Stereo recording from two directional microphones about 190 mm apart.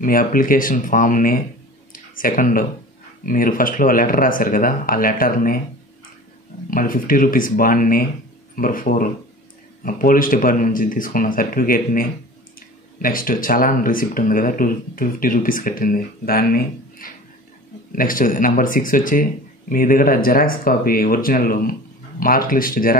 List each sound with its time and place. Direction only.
0.0 s speech: 45° left (ahead or behind)
1.9 s a sound: 45° left (ahead or behind)
3.3 s speech: 45° left (ahead or behind)
6.7 s speech: 45° left (ahead or behind)